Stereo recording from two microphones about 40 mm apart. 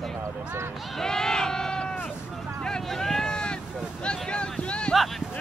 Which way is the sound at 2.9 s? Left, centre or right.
Centre.